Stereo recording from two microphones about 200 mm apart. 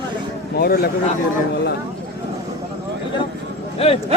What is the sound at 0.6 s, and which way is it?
Speech, 50° left (ahead or behind).